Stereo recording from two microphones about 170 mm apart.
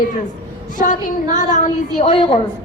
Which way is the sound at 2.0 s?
30° left (ahead or behind).